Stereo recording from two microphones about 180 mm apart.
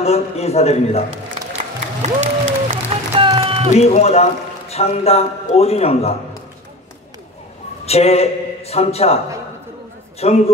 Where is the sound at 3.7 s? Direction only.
40° left (ahead or behind).